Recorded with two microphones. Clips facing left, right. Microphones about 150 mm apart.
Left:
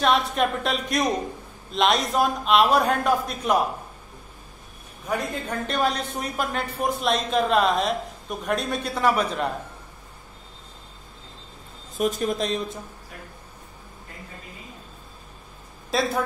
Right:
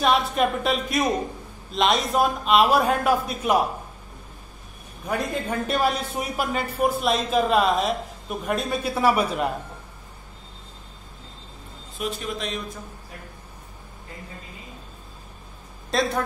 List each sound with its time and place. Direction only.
0.0 s speech: centre (ahead or behind)
5.5 s speech: 5° right (ahead or behind)
12.0 s speech: 40° left (ahead or behind)
15.9 s speech: 5° left (ahead or behind)